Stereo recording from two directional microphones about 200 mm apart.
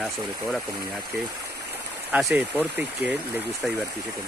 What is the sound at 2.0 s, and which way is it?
Speech, 5° right (ahead or behind).